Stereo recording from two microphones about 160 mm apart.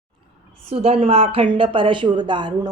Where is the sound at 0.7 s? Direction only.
40° right (ahead or behind).